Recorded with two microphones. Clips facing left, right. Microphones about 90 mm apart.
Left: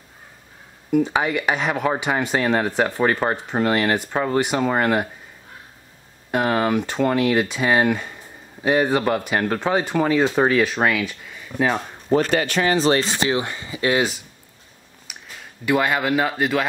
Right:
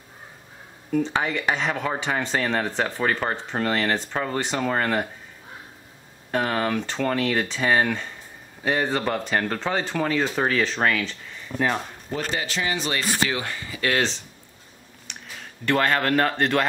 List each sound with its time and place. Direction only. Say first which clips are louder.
0.9 s speech: left 4 dB; 15° left (ahead or behind)
6.3 s speech: left 4 dB; 15° left (ahead or behind)
12.3 s speech: left 7 dB; 60° left (ahead or behind)
12.7 s speech: left 10 dB; 35° left (ahead or behind)
13.0 s speech: left 3 dB; 20° left (ahead or behind)
15.1 s a sound: even; 5° left (ahead or behind)
15.6 s speech: left 2 dB; 10° left (ahead or behind)